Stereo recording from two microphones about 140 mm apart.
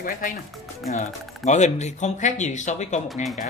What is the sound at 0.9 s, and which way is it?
Speech, 55° left (ahead or behind).